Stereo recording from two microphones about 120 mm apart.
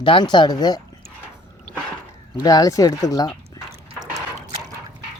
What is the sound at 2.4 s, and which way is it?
Speech, 30° left (ahead or behind).